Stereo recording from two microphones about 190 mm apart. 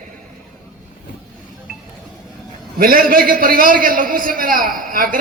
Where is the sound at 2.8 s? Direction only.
50° right (ahead or behind).